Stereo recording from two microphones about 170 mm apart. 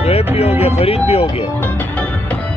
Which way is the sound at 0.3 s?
35° left (ahead or behind).